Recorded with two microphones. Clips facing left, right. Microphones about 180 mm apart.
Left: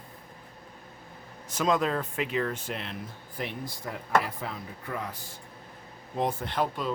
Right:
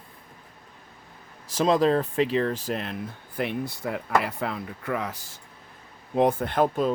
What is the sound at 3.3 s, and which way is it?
Speech, 65° right (ahead or behind).